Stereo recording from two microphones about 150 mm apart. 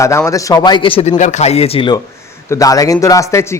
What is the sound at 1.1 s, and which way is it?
Speech, 55° left (ahead or behind).